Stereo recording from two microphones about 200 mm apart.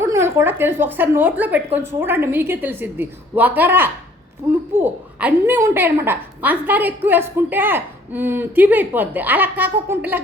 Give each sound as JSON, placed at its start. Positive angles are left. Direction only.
{"t": 0.0, "sound": "a woman's voice", "side_deg": -15}